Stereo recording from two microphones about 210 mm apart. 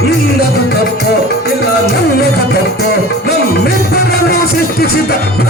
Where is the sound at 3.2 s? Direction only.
50° left (ahead or behind).